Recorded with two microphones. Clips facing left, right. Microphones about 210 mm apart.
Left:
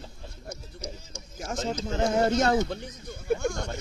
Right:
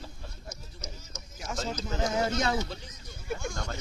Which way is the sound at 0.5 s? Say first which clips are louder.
Left 10 dB; 30° left (ahead or behind).